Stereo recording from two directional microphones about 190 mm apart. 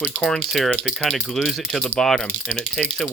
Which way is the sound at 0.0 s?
5° left (ahead or behind).